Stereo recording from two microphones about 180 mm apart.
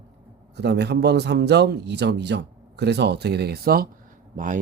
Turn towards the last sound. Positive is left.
turn(degrees=-45)  # may be behind; listen again after turning